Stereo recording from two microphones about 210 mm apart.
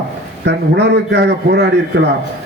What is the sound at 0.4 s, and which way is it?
A man's voice, 55° right (ahead or behind).